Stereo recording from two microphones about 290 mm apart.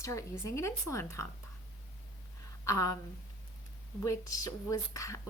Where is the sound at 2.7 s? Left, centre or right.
Left.